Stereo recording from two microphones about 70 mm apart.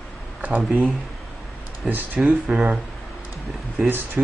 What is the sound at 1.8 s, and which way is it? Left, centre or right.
Speech, right.